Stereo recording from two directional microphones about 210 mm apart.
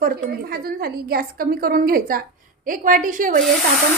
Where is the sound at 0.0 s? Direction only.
45° right (ahead or behind).